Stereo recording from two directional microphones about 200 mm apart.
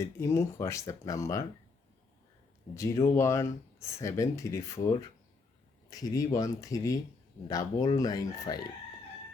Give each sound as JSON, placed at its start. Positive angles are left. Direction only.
{"t": 0.0, "sound": "speech", "side_deg": 15}
{"t": 2.7, "sound": "speech", "side_deg": 15}